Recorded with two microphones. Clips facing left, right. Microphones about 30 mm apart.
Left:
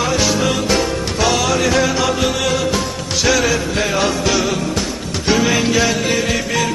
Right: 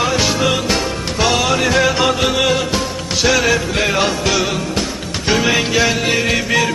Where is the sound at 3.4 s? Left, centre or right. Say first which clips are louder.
Right 2 dB; right.